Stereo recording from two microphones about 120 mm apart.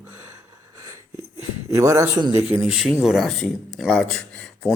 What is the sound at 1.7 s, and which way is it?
Speech, 25° right (ahead or behind).